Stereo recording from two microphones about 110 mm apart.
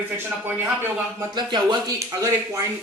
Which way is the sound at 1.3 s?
40° right (ahead or behind).